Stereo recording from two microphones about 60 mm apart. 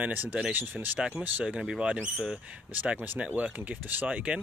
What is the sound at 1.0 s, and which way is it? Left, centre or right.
Speech, centre.